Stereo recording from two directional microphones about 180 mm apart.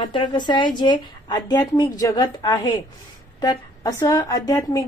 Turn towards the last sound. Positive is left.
turn(degrees=20)  # may be behind; listen again after turning